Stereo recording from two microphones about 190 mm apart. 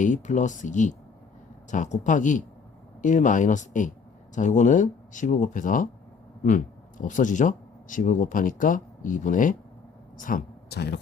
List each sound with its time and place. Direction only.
0.0 s speech: 40° left (ahead or behind)
7.0 s speech: 45° left (ahead or behind); by 11.0 s 60° left (ahead or behind)